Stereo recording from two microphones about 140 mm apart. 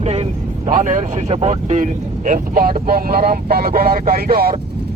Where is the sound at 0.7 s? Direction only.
65° right (ahead or behind).